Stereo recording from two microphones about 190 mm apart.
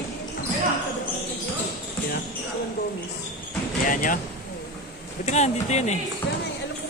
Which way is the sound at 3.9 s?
45° left (ahead or behind).